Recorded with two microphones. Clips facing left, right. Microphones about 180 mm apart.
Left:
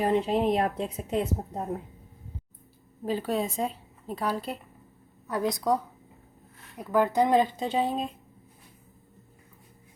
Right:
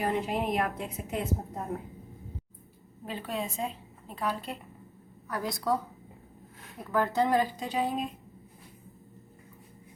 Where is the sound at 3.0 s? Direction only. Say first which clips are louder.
Left 7 dB; 40° left (ahead or behind).